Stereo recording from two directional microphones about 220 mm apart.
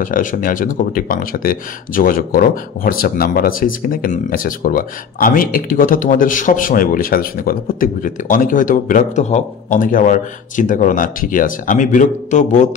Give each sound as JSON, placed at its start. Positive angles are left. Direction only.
{"t": 0.0, "sound": "speech", "side_deg": 40}